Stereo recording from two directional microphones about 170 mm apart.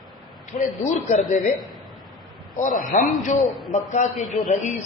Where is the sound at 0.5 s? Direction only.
50° left (ahead or behind).